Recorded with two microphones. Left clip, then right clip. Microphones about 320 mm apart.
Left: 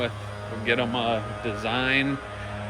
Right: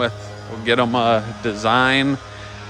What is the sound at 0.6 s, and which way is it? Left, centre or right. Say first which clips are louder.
Speech: right 8 dB; centre.